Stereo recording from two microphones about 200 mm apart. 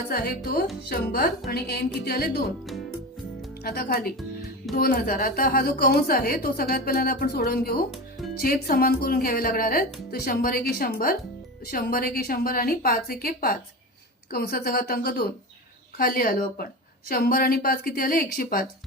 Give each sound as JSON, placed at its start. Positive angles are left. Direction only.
{"t": 0.1, "sound": "a woman's voice", "side_deg": 50}
{"t": 3.6, "sound": "a woman's voice", "side_deg": 50}